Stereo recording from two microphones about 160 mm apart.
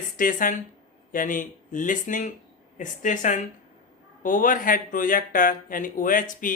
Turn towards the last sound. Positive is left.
turn(degrees=55)  # may be behind; listen again after turning